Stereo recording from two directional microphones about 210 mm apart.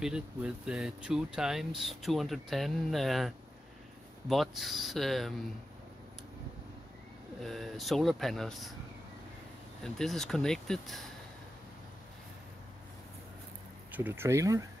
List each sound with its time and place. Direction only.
0.0 s speech: 5° right (ahead or behind)
7.3 s speech: centre (ahead or behind)
9.8 s speech: centre (ahead or behind)
13.9 s speech: 10° right (ahead or behind)